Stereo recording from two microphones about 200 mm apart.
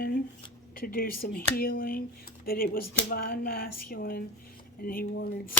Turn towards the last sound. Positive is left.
turn(degrees=50)  # may be behind; listen again after turning